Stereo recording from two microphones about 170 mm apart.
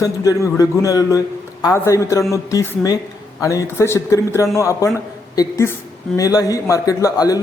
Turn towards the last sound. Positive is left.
turn(degrees=20)  # may be behind; listen again after turning